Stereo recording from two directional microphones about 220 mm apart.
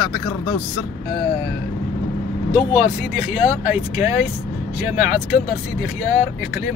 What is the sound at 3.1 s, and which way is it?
Speech, 5° right (ahead or behind).